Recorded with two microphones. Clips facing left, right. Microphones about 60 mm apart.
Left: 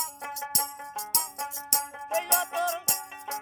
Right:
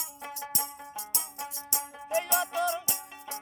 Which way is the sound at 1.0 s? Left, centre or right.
Left.